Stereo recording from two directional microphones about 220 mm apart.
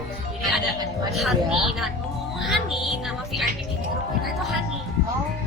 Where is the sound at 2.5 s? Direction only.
Centre (ahead or behind).